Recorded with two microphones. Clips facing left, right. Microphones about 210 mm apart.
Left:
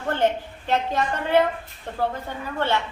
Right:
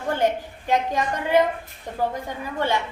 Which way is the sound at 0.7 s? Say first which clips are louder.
Right 1 dB; 15° right (ahead or behind).